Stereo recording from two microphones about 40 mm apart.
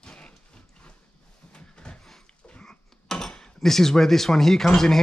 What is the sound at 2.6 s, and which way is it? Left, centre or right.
Speech, centre.